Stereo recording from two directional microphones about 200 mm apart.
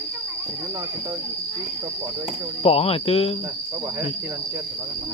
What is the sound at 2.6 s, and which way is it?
Speech, 30° left (ahead or behind).